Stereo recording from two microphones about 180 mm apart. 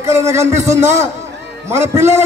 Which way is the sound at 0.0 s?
15° right (ahead or behind).